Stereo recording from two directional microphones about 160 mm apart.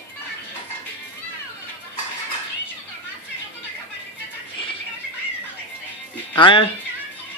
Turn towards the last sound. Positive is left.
turn(degrees=30)  # may be behind; listen again after turning